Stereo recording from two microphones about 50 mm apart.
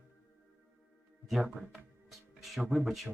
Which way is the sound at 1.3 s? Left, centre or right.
Centre.